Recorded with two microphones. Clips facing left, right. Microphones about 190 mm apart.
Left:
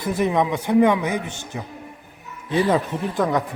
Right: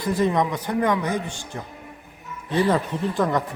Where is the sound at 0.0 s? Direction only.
20° left (ahead or behind).